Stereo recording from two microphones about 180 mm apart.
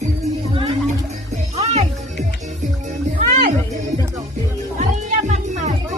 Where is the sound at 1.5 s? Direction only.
35° right (ahead or behind).